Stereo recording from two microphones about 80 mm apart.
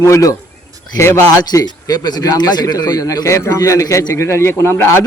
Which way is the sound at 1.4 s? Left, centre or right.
Left.